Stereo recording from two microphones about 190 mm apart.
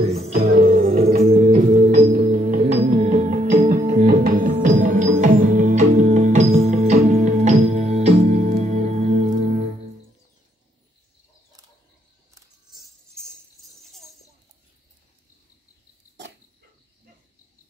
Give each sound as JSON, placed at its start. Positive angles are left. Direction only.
{"t": 0.0, "sound": "music", "side_deg": -35}
{"t": 1.3, "sound": "organ", "side_deg": -35}
{"t": 1.8, "sound": "music", "side_deg": -40}